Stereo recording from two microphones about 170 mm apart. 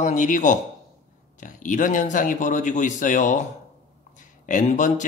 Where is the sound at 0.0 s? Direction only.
45° left (ahead or behind).